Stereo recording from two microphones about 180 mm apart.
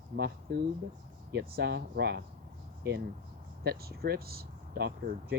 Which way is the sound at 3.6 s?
60° right (ahead or behind).